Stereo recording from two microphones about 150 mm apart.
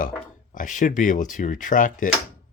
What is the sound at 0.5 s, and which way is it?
Speech, 60° left (ahead or behind).